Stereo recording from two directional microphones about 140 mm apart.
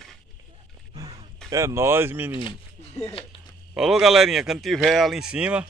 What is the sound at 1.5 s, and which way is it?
Speech, 20° right (ahead or behind).